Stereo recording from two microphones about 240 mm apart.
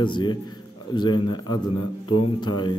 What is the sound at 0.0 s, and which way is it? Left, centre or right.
A man's voice, centre.